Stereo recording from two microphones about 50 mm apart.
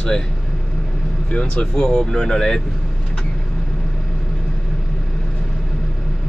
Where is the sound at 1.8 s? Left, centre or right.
Centre.